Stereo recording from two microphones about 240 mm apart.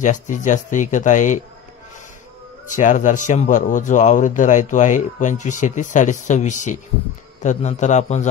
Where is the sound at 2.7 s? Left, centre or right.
Left.